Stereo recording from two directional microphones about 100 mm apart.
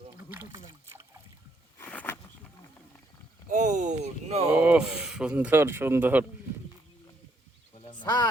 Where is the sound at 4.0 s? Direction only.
90° right.